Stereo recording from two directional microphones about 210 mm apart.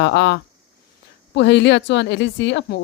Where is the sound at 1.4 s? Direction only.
55° left (ahead or behind).